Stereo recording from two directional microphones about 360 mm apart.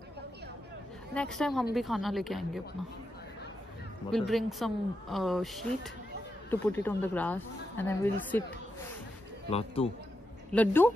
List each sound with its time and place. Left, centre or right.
1.1 s speech: centre
4.1 s speech: centre
9.5 s speech: centre
10.5 s speech: centre